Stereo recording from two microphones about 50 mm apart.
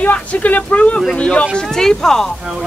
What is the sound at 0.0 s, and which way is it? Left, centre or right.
Speech, left.